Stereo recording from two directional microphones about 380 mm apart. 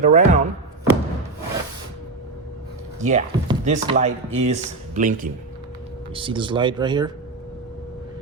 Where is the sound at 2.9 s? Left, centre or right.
Centre.